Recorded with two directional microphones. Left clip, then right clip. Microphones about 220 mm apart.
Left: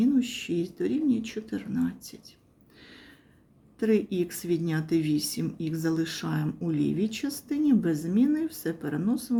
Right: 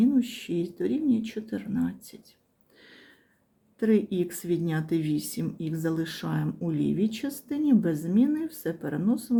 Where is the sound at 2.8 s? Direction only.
Centre (ahead or behind).